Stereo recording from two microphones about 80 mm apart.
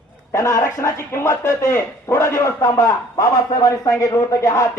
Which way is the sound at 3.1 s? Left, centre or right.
Left.